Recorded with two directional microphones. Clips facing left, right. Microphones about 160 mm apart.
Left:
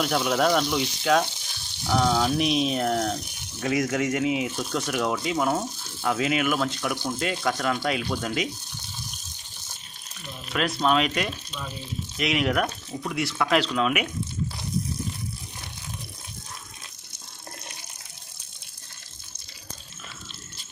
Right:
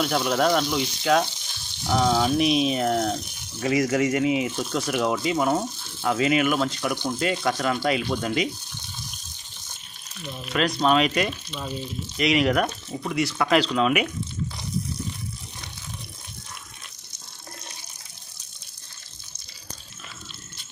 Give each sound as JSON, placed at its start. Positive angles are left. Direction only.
{"t": 0.0, "sound": "speech", "side_deg": 0}
{"t": 10.5, "sound": "speech", "side_deg": 0}